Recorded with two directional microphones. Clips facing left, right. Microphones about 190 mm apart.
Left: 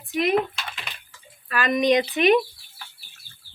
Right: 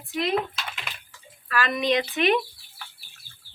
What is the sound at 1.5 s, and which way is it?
Speech, 20° left (ahead or behind).